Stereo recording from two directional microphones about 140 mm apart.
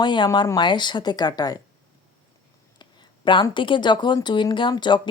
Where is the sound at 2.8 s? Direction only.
35° left (ahead or behind).